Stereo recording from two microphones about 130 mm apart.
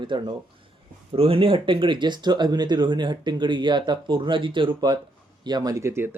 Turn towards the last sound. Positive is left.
turn(degrees=-20)  # may be behind; listen again after turning